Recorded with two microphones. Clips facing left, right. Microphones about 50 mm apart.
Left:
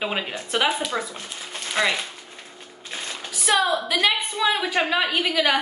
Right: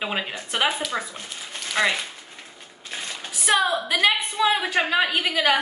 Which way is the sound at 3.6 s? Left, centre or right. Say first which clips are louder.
Left 1 dB; right.